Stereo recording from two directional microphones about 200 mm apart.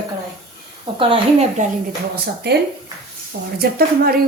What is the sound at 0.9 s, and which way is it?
Speech, 30° right (ahead or behind).